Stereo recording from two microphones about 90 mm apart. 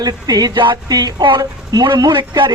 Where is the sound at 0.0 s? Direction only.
45° right (ahead or behind).